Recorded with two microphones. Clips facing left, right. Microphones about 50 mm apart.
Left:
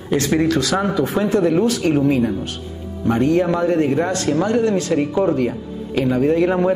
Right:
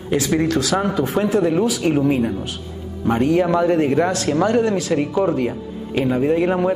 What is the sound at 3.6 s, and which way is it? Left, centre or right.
Speech, right.